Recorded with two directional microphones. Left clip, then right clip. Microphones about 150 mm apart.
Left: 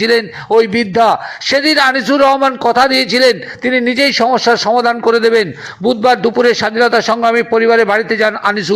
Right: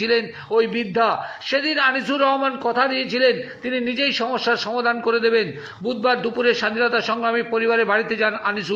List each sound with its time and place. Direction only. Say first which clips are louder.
0.0 s a man's voice: left 8 dB; 45° left (ahead or behind)